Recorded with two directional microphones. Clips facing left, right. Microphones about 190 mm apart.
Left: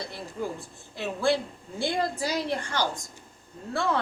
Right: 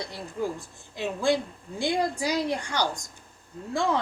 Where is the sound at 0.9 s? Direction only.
15° right (ahead or behind).